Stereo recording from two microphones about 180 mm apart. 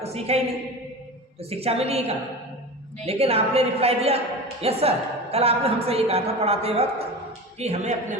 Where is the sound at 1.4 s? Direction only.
35° right (ahead or behind).